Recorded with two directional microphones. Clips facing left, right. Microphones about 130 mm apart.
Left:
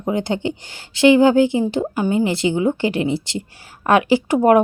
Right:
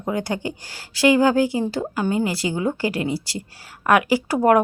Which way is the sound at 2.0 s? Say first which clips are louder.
Left 3 dB; 20° left (ahead or behind).